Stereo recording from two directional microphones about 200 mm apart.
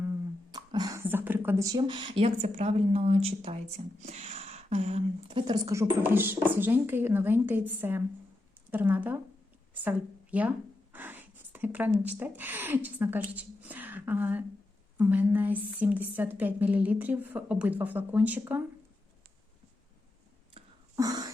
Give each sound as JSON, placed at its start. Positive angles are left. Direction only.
{"t": 0.0, "sound": "speech", "side_deg": -15}
{"t": 5.5, "sound": "a woman's voice", "side_deg": -15}
{"t": 10.3, "sound": "a woman's voice", "side_deg": -5}
{"t": 20.9, "sound": "a sound", "side_deg": -20}